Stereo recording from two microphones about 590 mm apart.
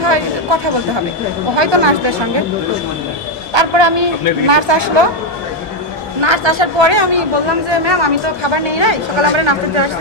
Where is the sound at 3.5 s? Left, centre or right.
Right.